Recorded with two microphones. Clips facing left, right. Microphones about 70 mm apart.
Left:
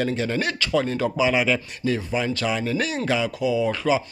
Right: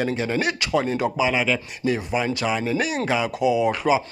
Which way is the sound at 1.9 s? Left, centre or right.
Centre.